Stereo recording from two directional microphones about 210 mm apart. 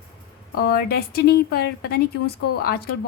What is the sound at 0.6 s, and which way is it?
A woman's voice, 50° left (ahead or behind).